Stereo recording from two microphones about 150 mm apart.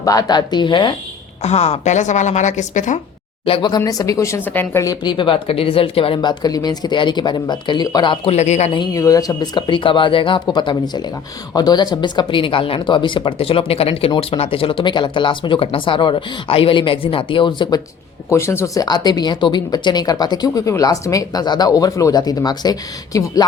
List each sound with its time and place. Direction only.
0.0 s speech: 25° left (ahead or behind)
1.4 s a woman's voice: 45° left (ahead or behind)
3.4 s speech: 35° left (ahead or behind); by 8.7 s 50° left (ahead or behind)
8.7 s speech: 25° left (ahead or behind)
18.3 s speech: 20° left (ahead or behind)